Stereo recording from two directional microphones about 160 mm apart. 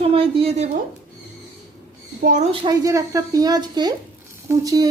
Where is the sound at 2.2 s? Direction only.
50° right (ahead or behind).